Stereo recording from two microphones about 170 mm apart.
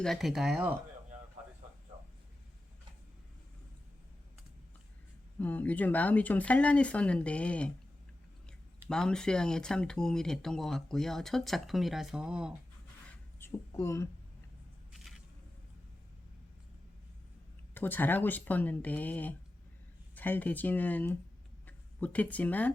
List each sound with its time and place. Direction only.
0.0 s speech: centre (ahead or behind)
5.4 s speech: 10° left (ahead or behind)
8.9 s speech: 5° left (ahead or behind)
13.4 s speech: 15° left (ahead or behind)
14.9 s a sound: centre (ahead or behind)
17.7 s speech: 10° left (ahead or behind)